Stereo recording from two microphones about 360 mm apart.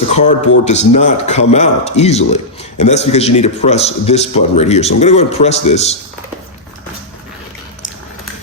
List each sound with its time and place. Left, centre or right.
0.1 s speech: centre